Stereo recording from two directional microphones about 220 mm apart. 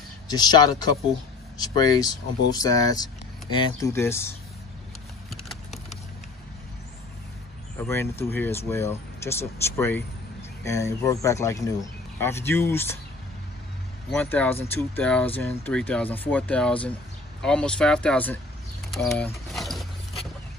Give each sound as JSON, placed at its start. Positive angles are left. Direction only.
{"t": 0.3, "sound": "speech", "side_deg": 20}
{"t": 5.3, "sound": "clip-clop", "side_deg": 0}
{"t": 7.8, "sound": "speech", "side_deg": 10}
{"t": 14.1, "sound": "speech", "side_deg": 5}
{"t": 18.9, "sound": "a sound", "side_deg": 0}